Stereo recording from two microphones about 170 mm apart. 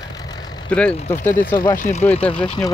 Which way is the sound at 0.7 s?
5° left (ahead or behind).